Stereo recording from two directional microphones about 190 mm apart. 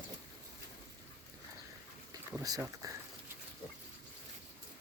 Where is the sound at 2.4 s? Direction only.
20° right (ahead or behind).